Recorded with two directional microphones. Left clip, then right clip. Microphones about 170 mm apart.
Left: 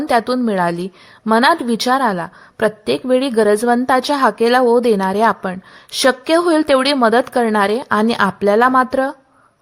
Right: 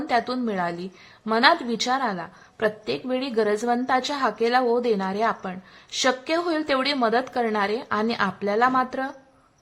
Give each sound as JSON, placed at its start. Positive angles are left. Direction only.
{"t": 0.1, "sound": "a woman's voice", "side_deg": 45}